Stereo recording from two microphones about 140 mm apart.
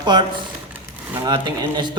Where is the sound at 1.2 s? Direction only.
30° right (ahead or behind).